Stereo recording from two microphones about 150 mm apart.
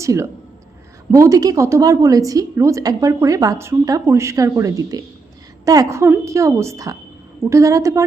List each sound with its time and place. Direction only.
0.0 s a woman's voice: 20° right (ahead or behind)